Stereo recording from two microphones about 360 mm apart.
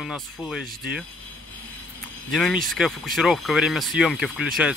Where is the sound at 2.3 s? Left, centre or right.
Centre.